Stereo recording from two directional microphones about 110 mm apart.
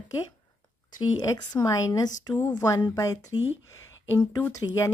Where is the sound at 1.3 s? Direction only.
30° left (ahead or behind).